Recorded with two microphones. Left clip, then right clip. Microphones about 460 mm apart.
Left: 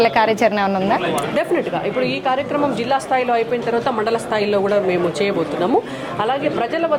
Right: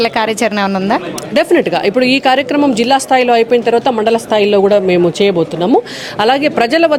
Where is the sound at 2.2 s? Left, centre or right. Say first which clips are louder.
Right 7 dB; right.